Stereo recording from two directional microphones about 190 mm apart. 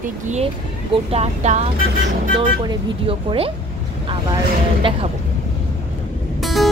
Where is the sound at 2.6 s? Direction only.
30° right (ahead or behind).